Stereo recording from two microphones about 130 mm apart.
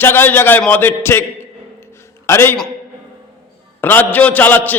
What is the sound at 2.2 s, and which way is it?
Speech, 20° left (ahead or behind).